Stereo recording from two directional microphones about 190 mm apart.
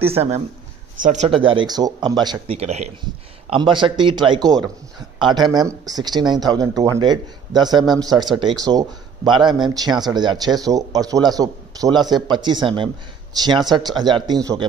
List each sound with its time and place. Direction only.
0.0 s speech: 30° right (ahead or behind)